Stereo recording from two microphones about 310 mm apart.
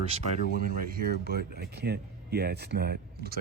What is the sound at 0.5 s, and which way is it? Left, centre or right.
Speech, right.